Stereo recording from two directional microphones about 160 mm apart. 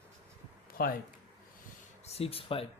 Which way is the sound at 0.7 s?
65° left (ahead or behind).